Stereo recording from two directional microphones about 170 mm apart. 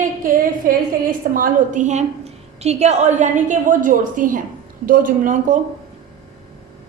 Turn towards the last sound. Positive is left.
turn(degrees=-50)  # may be behind; listen again after turning